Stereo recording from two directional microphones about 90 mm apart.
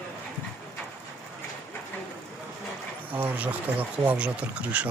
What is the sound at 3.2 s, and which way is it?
Speech, 20° right (ahead or behind).